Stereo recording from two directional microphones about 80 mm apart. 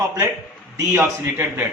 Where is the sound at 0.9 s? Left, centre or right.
Right.